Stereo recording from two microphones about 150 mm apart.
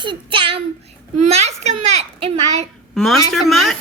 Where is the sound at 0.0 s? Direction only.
35° right (ahead or behind).